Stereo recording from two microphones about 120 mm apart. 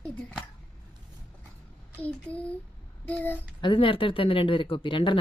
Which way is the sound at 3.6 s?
45° left (ahead or behind).